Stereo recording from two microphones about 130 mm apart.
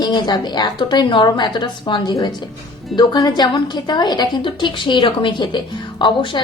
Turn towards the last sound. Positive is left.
turn(degrees=35)  # may be behind; listen again after turning